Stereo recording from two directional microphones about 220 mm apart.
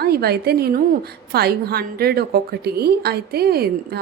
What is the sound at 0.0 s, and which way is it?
A woman's voice, 45° right (ahead or behind).